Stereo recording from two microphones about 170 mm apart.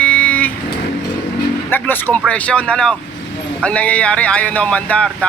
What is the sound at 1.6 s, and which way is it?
A man's voice, 10° left (ahead or behind).